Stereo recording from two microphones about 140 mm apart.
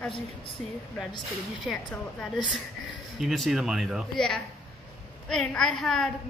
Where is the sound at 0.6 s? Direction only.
5° left (ahead or behind).